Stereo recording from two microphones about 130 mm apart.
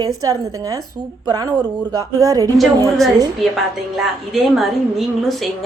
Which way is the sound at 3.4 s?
Centre (ahead or behind).